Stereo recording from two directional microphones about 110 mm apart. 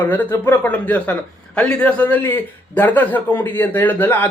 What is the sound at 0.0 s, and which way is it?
A man's voice, 15° left (ahead or behind).